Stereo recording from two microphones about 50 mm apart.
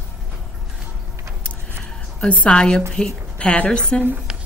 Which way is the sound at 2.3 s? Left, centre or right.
Left.